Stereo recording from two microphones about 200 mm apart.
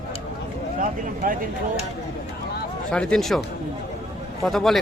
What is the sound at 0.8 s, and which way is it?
Speech, 45° right (ahead or behind).